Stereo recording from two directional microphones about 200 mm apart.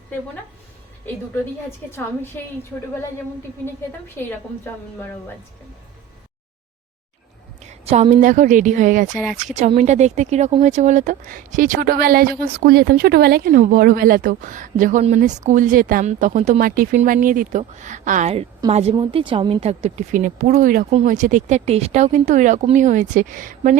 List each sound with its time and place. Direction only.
1.9 s a woman's voice: 10° left (ahead or behind)
7.9 s speech: 30° right (ahead or behind)